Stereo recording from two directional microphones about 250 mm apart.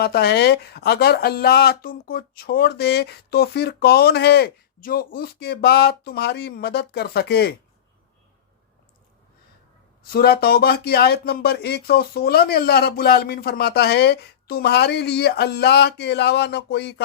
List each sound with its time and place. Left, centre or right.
0.0 s speech: left
10.1 s speech: left